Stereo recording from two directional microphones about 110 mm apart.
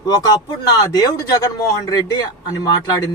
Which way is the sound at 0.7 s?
35° left (ahead or behind).